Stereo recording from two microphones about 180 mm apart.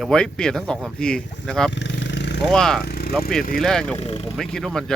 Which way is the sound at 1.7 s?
75° left (ahead or behind).